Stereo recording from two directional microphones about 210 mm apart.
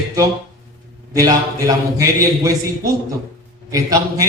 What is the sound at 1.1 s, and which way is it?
A man's voice, 15° right (ahead or behind).